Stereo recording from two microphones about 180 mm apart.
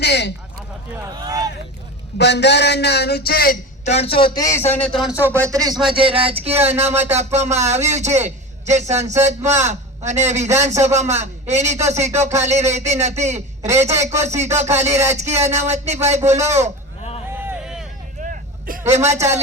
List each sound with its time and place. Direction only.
0.0 s a man's voice: 70° left (ahead or behind)
1.1 s a sound: 20° right (ahead or behind)
2.1 s a man's voice: 70° left (ahead or behind); by 3.6 s 55° left (ahead or behind)
3.8 s speech: 35° left (ahead or behind)
4.5 s speech: 10° left (ahead or behind)
5.2 s a man's voice: 15° right (ahead or behind); by 16.7 s 40° right (ahead or behind)
17.3 s a sound: 10° right (ahead or behind)
18.2 s vehicle: 50° right (ahead or behind)